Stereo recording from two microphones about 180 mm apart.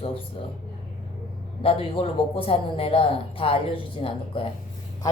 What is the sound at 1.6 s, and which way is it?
Speech, 30° left (ahead or behind).